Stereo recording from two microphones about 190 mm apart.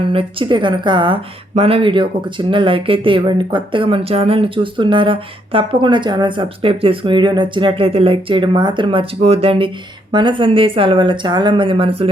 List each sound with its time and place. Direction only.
0.1 s speech: 30° right (ahead or behind)